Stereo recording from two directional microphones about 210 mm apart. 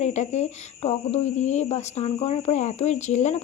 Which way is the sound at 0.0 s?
35° left (ahead or behind).